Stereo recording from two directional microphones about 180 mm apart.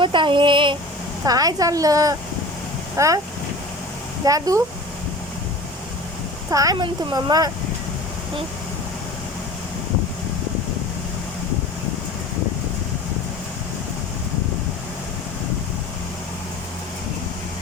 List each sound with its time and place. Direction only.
0.0 s a sound: 25° right (ahead or behind)
1.2 s a woman's voice: 20° right (ahead or behind)
4.3 s a woman's voice: 20° right (ahead or behind)
6.5 s a woman's voice: 20° right (ahead or behind)